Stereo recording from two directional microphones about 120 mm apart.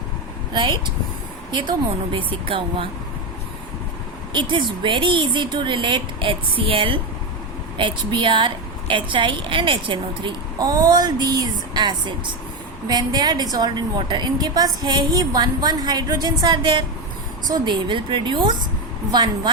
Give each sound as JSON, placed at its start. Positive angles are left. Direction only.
{"t": 0.5, "sound": "a woman's voice", "side_deg": -40}
{"t": 2.1, "sound": "a woman's voice", "side_deg": -50}
{"t": 4.3, "sound": "a woman's voice", "side_deg": -40}